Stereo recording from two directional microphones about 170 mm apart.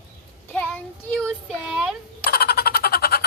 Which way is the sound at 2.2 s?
60° left (ahead or behind).